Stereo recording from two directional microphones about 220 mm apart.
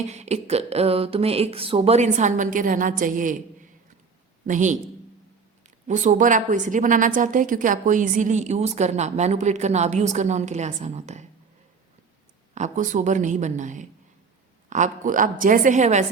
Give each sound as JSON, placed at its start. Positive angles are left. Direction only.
{"t": 0.1, "sound": "a sound", "side_deg": -30}
{"t": 4.4, "sound": "a woman's voice", "side_deg": -35}
{"t": 5.9, "sound": "a woman's voice", "side_deg": -35}
{"t": 12.5, "sound": "a woman's voice", "side_deg": -35}